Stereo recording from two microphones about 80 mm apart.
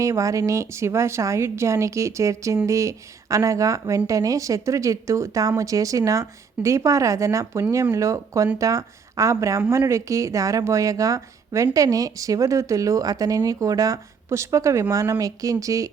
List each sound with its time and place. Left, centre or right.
0.0 s a woman's voice: right